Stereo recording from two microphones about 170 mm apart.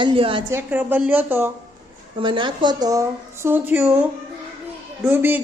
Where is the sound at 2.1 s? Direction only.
30° right (ahead or behind).